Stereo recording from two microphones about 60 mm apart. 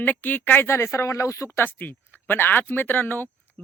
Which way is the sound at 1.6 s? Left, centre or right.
Left.